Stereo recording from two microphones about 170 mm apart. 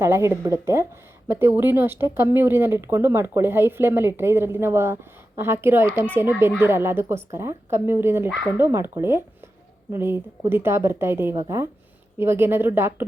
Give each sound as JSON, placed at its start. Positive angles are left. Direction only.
{"t": 0.0, "sound": "speech", "side_deg": -15}